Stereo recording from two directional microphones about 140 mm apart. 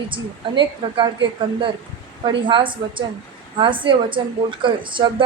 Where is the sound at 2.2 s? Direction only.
35° right (ahead or behind).